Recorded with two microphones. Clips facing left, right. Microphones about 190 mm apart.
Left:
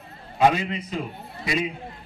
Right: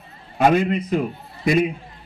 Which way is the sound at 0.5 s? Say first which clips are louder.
Right 7 dB; 55° right (ahead or behind).